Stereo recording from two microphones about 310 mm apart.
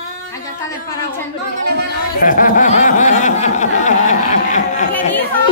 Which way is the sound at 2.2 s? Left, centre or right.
Left.